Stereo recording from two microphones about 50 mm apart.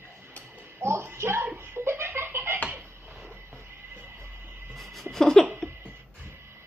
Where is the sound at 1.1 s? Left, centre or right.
Right.